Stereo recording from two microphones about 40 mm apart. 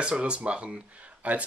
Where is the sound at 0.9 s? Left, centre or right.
Right.